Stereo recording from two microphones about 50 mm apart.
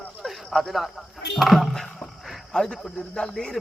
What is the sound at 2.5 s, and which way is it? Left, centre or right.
A man's voice, centre.